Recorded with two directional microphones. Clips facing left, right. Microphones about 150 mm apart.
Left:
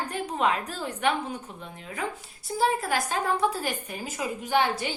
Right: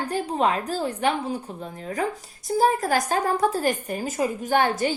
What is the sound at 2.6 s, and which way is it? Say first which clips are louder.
A woman's voice: right 4 dB; 40° right (ahead or behind).